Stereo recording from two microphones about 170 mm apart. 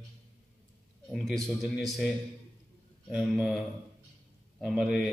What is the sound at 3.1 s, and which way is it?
Speech, centre (ahead or behind).